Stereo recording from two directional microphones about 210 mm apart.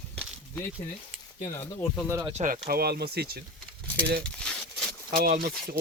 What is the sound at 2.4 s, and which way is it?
Speech, 40° right (ahead or behind).